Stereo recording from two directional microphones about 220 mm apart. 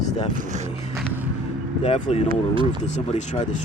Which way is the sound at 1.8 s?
30° left (ahead or behind).